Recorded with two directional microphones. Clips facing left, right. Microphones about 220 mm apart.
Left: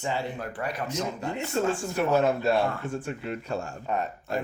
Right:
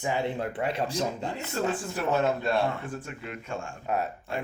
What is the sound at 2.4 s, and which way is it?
Speech, 25° left (ahead or behind).